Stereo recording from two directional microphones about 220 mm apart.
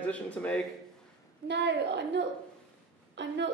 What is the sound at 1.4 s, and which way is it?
A woman's voice, 50° right (ahead or behind).